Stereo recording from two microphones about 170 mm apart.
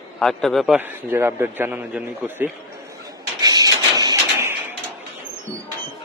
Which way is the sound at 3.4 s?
20° right (ahead or behind).